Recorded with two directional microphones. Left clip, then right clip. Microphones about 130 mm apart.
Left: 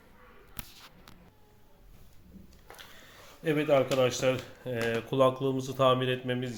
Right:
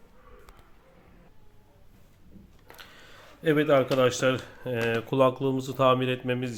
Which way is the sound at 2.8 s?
50° right (ahead or behind).